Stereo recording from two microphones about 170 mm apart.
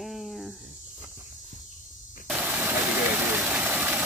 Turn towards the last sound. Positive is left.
turn(degrees=-10)  # may be behind; listen again after turning